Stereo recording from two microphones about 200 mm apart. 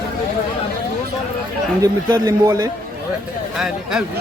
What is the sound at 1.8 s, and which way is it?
Speech, 20° right (ahead or behind).